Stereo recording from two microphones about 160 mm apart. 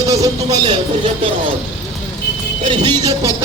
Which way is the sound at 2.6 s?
30° right (ahead or behind).